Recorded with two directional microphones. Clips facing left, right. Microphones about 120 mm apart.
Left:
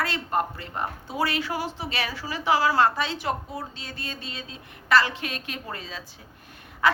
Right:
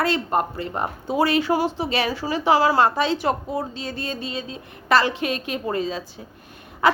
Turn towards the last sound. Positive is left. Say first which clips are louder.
# right 4 dB
turn(degrees=-15)  # may be behind; listen again after turning